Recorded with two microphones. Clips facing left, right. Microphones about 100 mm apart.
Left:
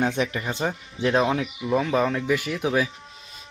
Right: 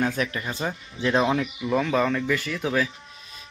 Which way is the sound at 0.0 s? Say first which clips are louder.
Left 2 dB; 25° left (ahead or behind).